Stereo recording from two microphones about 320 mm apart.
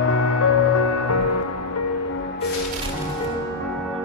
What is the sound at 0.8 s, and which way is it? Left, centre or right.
Music, left.